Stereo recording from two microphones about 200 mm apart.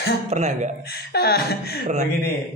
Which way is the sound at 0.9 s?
50° left (ahead or behind).